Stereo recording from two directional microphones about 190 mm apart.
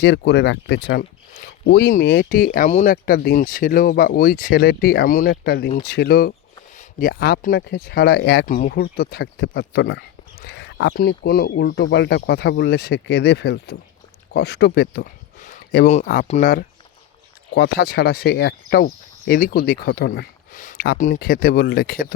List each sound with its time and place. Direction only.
0.0 s speech: 65° left (ahead or behind)
1.6 s speech: 60° left (ahead or behind)
2.0 s speech: 70° left (ahead or behind)
2.3 s speech: 45° left (ahead or behind)
8.4 s speech: 45° left (ahead or behind)
8.8 s speech: 55° left (ahead or behind)
17.5 s speech: 55° left (ahead or behind)
20.5 s a sound: 45° left (ahead or behind)
21.1 s speech: 50° left (ahead or behind)